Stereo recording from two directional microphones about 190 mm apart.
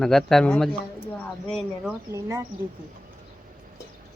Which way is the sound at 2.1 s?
15° right (ahead or behind).